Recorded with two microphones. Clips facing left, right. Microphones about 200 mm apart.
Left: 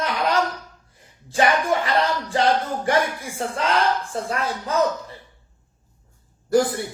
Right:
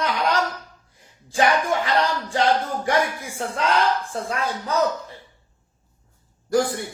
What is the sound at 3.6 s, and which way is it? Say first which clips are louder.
Speech: right 1 dB; centre (ahead or behind).